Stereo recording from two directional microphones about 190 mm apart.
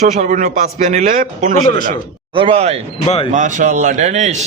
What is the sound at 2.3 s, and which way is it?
A man's voice, 30° right (ahead or behind).